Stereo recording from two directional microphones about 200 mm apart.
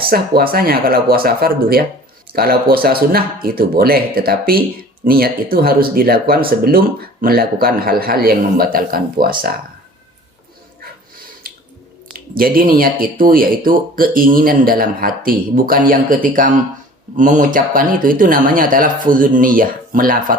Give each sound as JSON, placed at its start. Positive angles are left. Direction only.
{"t": 0.1, "sound": "speech", "side_deg": -50}
{"t": 11.4, "sound": "squish", "side_deg": -50}
{"t": 12.1, "sound": "speech", "side_deg": -45}